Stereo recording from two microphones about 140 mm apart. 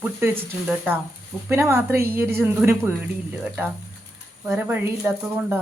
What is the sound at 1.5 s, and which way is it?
A woman's voice, 15° right (ahead or behind).